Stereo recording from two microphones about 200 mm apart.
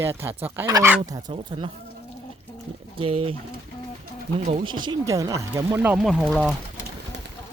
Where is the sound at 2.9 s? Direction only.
30° right (ahead or behind).